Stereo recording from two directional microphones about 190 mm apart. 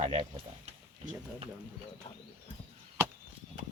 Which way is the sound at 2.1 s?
30° left (ahead or behind).